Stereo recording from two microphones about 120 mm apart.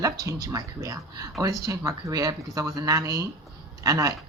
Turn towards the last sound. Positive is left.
turn(degrees=-30)  # may be behind; listen again after turning